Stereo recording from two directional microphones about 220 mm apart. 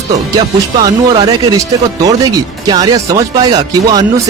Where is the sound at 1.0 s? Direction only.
20° right (ahead or behind).